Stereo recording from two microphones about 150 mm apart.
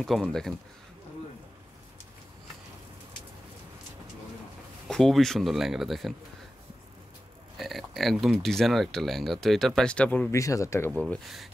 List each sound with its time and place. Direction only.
0.0 s speech: centre (ahead or behind)
4.8 s speech: 5° left (ahead or behind)
7.5 s speech: centre (ahead or behind)
10.3 s speech: 20° left (ahead or behind)
11.0 s speech: centre (ahead or behind)